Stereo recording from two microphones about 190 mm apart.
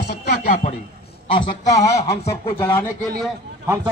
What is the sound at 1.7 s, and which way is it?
Speech, 15° left (ahead or behind).